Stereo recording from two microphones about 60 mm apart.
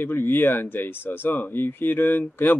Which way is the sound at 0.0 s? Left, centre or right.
Left.